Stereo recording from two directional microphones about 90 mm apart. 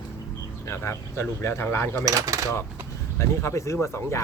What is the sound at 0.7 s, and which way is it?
Speech, 30° left (ahead or behind).